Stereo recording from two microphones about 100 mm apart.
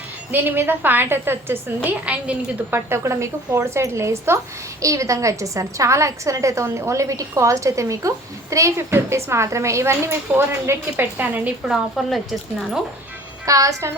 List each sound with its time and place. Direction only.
0.3 s a woman's voice: 20° right (ahead or behind)
2.7 s a woman's voice: 25° right (ahead or behind)
11.7 s speech: 5° right (ahead or behind)
13.4 s a woman's voice: 35° right (ahead or behind)